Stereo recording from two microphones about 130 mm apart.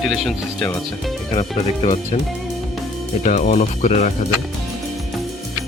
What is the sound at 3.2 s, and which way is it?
Speech, 75° left (ahead or behind).